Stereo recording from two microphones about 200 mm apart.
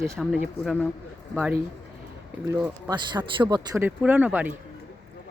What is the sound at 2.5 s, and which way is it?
Speech, 10° right (ahead or behind).